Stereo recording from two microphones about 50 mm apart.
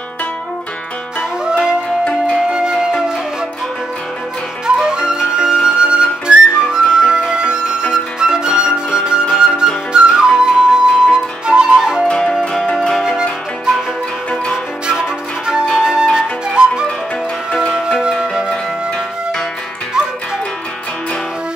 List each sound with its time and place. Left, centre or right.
1.4 s music: centre
2.3 s flute: centre
4.6 s flute: centre
12.5 s music: centre
14.5 s music: centre
15.8 s flute: centre
17.7 s music: centre